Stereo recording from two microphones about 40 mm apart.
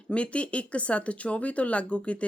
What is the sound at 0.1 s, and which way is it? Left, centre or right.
A woman's voice, left.